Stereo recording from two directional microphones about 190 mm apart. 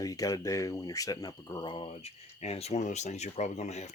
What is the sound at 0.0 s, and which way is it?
Speech, 20° left (ahead or behind).